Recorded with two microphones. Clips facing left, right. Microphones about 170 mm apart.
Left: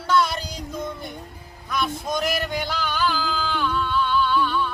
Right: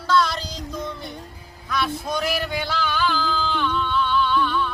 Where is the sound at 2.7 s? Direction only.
5° left (ahead or behind).